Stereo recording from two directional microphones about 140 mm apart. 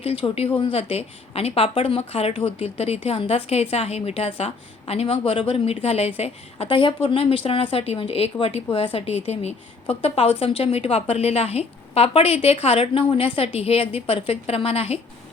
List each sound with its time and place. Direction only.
0.0 s a woman's voice: 45° left (ahead or behind)